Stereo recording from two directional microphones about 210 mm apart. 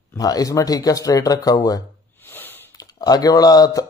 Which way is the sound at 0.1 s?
15° left (ahead or behind).